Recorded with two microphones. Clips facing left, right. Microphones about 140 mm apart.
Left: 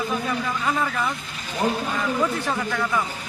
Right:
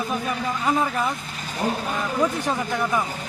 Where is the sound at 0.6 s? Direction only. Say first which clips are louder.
Right 5 dB; 20° right (ahead or behind).